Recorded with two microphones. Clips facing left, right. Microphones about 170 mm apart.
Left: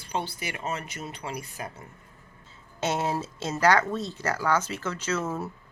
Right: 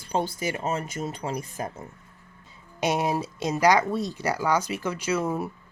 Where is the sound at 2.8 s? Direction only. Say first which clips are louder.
Right 3 dB; 15° right (ahead or behind).